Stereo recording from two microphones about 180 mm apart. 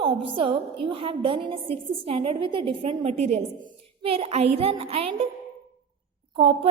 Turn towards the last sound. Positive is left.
turn(degrees=-30)  # may be behind; listen again after turning